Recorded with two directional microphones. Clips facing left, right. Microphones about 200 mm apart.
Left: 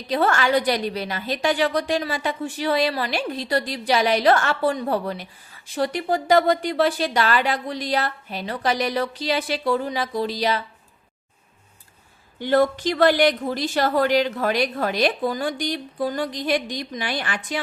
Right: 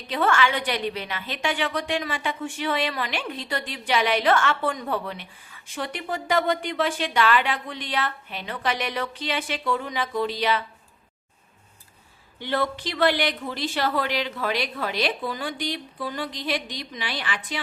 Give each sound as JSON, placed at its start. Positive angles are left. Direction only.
{"t": 0.1, "sound": "a woman's voice", "side_deg": 40}
{"t": 12.4, "sound": "a woman's voice", "side_deg": 45}